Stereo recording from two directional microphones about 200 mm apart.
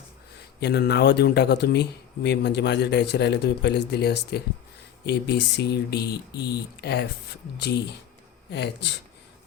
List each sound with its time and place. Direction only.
0.6 s speech: 55° left (ahead or behind)
8.4 s speech: 60° left (ahead or behind)